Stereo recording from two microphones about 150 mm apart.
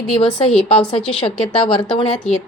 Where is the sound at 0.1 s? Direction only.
35° left (ahead or behind).